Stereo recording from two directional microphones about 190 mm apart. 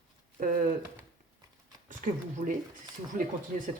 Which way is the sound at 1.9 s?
45° right (ahead or behind).